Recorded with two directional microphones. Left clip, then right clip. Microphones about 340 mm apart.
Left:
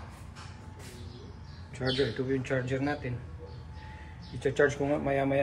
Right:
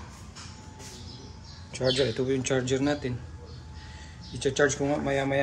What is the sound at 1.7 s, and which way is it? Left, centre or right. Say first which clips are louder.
Speech: right 5 dB; centre.